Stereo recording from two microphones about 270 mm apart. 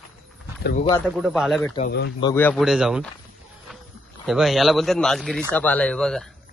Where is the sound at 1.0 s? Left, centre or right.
Centre.